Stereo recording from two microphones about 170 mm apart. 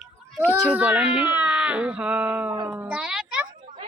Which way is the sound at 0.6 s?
10° right (ahead or behind).